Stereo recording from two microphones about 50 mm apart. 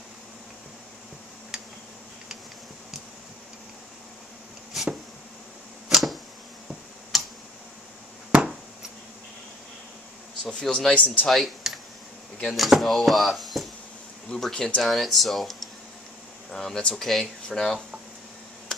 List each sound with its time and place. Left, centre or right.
1.5 s tick-tock: centre
4.7 s a sound: centre
5.9 s arrow: centre
7.1 s tick: centre
10.6 s a man's voice: centre
11.2 s speech: centre
14.3 s a man's voice: centre